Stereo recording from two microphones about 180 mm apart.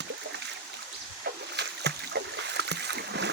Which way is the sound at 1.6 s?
70° right (ahead or behind).